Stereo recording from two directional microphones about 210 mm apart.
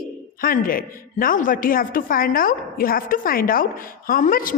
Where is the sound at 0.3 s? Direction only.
40° left (ahead or behind).